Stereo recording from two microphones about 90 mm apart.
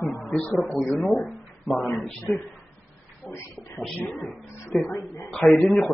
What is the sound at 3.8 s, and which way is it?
Speech, centre (ahead or behind).